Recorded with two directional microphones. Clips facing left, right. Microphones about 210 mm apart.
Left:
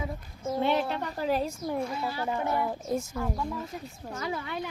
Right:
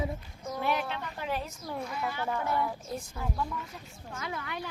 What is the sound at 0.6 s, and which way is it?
A woman's voice, 30° left (ahead or behind).